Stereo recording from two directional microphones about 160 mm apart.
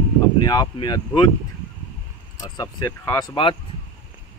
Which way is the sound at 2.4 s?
25° left (ahead or behind).